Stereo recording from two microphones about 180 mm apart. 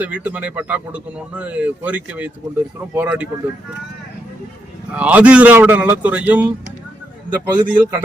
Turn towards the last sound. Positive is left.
turn(degrees=-10)  # may be behind; listen again after turning